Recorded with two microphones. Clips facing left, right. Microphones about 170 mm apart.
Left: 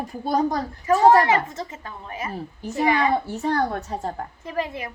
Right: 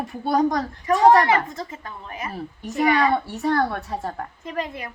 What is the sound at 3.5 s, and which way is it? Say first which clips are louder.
A woman's voice: right 2 dB; 35° left (ahead or behind).